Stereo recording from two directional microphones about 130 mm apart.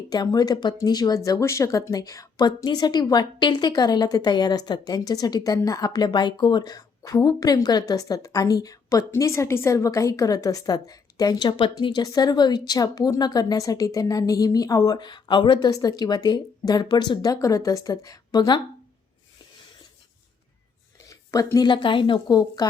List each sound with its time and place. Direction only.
0.1 s speech: 30° left (ahead or behind)
21.1 s speech: 25° left (ahead or behind)